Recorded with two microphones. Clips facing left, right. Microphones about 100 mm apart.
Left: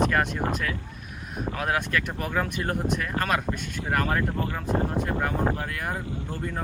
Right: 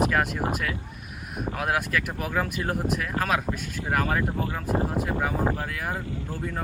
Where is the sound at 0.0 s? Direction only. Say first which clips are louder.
Even; 5° right (ahead or behind).